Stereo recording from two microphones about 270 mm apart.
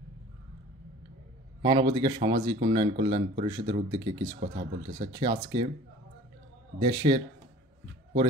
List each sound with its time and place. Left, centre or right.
1.6 s speech: centre
6.8 s speech: centre